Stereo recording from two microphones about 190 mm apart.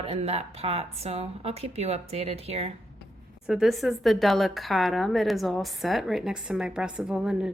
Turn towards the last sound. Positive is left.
turn(degrees=-5)  # may be behind; listen again after turning